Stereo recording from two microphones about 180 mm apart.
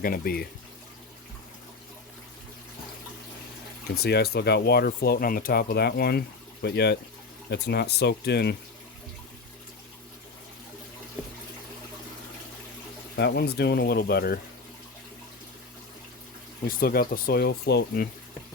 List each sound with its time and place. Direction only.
0.0 s speech: 55° left (ahead or behind)
3.9 s speech: 60° left (ahead or behind)
13.1 s speech: 65° left (ahead or behind)
16.6 s speech: 55° left (ahead or behind)